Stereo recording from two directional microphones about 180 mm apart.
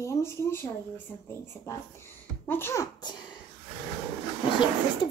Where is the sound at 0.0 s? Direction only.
15° left (ahead or behind).